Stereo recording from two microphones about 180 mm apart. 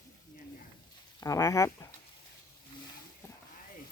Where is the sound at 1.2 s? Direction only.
20° left (ahead or behind).